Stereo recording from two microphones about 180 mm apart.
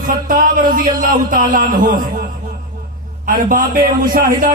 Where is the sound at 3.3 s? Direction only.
50° right (ahead or behind).